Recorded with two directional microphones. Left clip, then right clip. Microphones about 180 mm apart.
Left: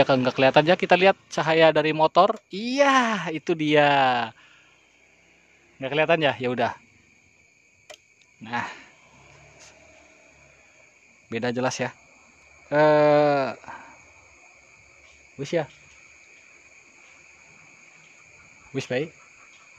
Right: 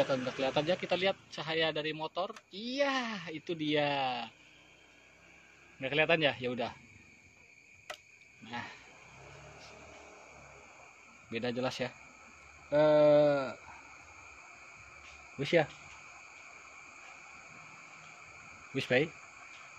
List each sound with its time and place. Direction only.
0.0 s speech: 55° left (ahead or behind)
5.8 s a man's voice: 35° left (ahead or behind)
8.5 s speech: 45° left (ahead or behind)
11.2 s a man's voice: 40° left (ahead or behind)
15.3 s speech: 25° left (ahead or behind)
18.7 s speech: 25° left (ahead or behind)